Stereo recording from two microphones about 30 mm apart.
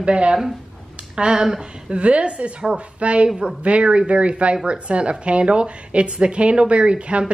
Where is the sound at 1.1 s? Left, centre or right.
Right.